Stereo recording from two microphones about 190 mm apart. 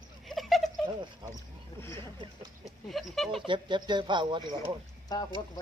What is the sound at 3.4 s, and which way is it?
Speech, 25° right (ahead or behind).